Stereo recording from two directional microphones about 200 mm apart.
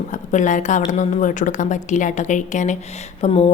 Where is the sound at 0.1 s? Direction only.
40° left (ahead or behind).